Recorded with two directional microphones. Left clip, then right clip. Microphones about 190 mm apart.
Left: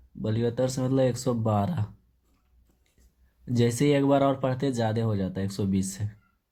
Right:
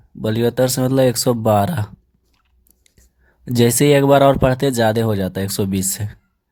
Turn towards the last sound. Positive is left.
turn(degrees=-40)  # may be behind; listen again after turning